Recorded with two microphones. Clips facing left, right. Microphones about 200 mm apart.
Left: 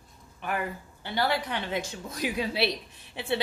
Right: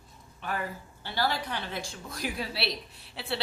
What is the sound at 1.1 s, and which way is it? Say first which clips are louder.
A woman's voice: left 3 dB; 20° left (ahead or behind).